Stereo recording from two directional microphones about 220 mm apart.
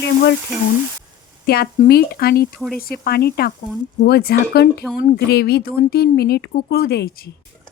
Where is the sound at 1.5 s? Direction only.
45° left (ahead or behind).